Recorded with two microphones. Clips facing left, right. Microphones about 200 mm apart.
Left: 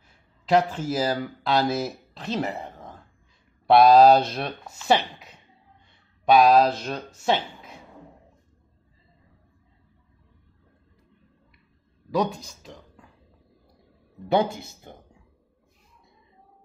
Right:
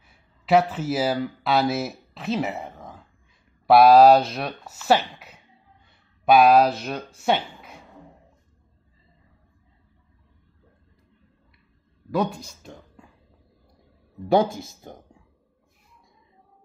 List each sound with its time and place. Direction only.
0.5 s speech: 5° right (ahead or behind)
12.2 s speech: 10° right (ahead or behind)
14.3 s speech: 45° right (ahead or behind)